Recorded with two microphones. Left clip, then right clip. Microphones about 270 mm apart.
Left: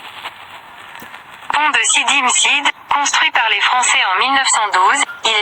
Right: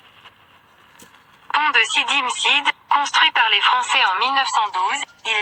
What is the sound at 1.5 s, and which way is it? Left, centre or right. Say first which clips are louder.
A woman's voice: left 3 dB; left.